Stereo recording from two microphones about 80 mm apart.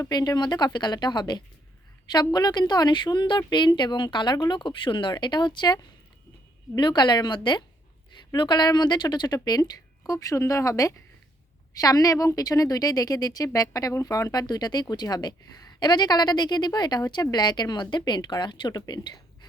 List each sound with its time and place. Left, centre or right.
0.0 s a woman's voice: left
14.4 s a woman's voice: left